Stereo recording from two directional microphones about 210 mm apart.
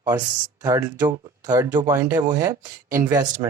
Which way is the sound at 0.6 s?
10° right (ahead or behind).